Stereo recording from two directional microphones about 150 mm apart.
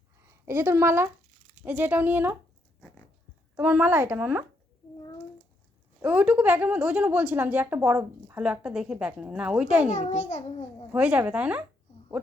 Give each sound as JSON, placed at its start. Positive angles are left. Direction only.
{"t": 0.4, "sound": "a woman's voice", "side_deg": -15}
{"t": 3.5, "sound": "a woman's voice", "side_deg": -10}
{"t": 6.0, "sound": "a woman's voice", "side_deg": -10}
{"t": 9.9, "sound": "a child's voice", "side_deg": 50}
{"t": 10.9, "sound": "a woman's voice", "side_deg": -10}